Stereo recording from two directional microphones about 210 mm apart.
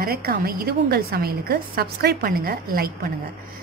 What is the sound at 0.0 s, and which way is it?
A woman's voice, 45° right (ahead or behind).